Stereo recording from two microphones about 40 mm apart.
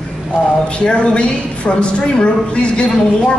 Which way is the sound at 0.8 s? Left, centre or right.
Left.